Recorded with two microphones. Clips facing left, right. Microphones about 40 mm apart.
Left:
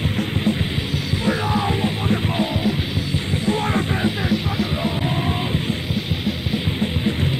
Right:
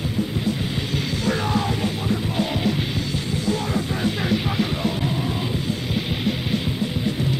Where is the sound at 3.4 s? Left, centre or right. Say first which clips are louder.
Left 4 dB; left.